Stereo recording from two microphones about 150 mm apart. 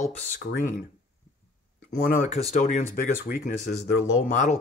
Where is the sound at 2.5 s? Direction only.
50° left (ahead or behind).